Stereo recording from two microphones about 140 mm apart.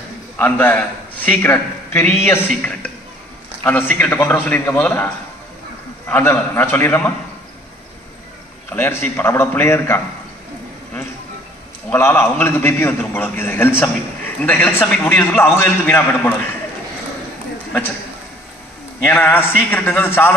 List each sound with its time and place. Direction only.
0.4 s a man's voice: 15° left (ahead or behind)
8.6 s a man's voice: 15° left (ahead or behind)
11.9 s a man's voice: 15° left (ahead or behind)
19.0 s a man's voice: 15° left (ahead or behind)